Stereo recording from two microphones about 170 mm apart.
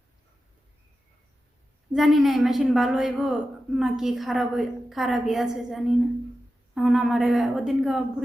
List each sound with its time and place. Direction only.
1.9 s a woman's voice: centre (ahead or behind)